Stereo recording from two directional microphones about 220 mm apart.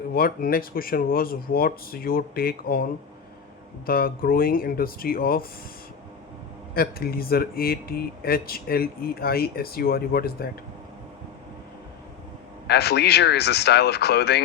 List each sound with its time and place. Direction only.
0.1 s speech: 40° left (ahead or behind)
3.8 s speech: 40° left (ahead or behind)
6.7 s speech: 45° left (ahead or behind)
12.6 s speech: 50° left (ahead or behind)